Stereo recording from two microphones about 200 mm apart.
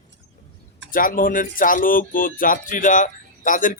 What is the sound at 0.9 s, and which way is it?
Speech, 45° left (ahead or behind).